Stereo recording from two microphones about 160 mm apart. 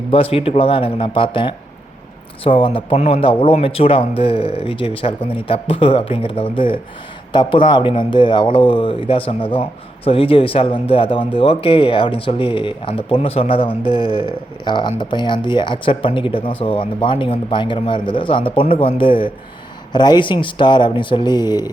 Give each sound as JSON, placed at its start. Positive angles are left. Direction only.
{"t": 0.1, "sound": "speech", "side_deg": 35}